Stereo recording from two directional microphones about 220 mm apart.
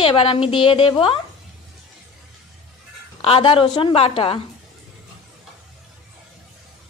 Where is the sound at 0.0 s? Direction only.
25° left (ahead or behind).